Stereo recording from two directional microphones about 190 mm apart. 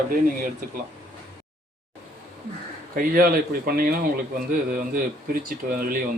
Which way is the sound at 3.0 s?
50° right (ahead or behind).